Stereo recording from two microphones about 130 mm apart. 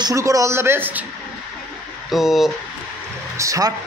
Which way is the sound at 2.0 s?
Centre (ahead or behind).